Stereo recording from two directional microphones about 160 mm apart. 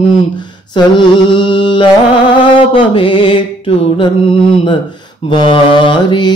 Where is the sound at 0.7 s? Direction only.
30° left (ahead or behind).